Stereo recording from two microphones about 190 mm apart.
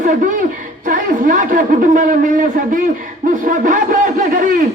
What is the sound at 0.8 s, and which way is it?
A man's voice, 45° right (ahead or behind).